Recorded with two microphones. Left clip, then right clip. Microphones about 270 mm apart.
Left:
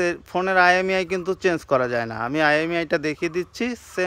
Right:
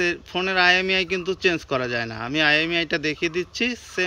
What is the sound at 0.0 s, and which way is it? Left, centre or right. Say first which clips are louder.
Speech: left 1 dB; centre.